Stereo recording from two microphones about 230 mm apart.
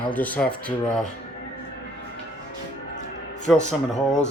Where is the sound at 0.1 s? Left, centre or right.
Centre.